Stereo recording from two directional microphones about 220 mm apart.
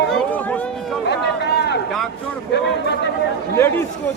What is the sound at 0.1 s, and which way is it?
Run, 5° left (ahead or behind).